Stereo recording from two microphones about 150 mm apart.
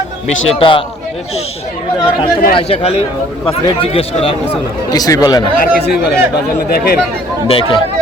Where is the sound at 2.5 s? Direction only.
40° left (ahead or behind).